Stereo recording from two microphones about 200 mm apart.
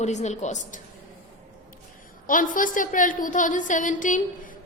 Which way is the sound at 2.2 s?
40° left (ahead or behind).